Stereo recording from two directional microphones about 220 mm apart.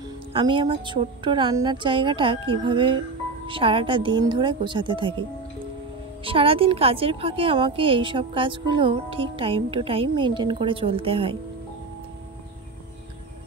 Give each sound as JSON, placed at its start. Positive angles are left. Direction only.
{"t": 0.3, "sound": "a woman's voice", "side_deg": -20}
{"t": 6.2, "sound": "a woman's voice", "side_deg": -25}